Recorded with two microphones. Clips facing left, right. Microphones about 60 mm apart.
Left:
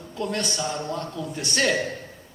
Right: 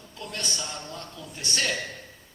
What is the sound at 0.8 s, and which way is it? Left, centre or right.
Speech, left.